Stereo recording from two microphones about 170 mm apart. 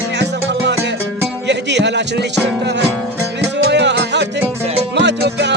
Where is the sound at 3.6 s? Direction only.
85° right.